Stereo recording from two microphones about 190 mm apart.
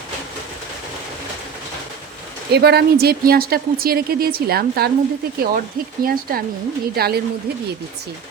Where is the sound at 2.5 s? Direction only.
60° right (ahead or behind).